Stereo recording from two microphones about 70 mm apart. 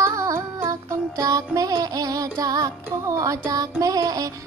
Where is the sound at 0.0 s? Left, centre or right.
Right.